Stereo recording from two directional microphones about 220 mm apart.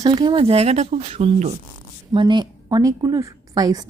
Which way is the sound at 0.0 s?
20° right (ahead or behind).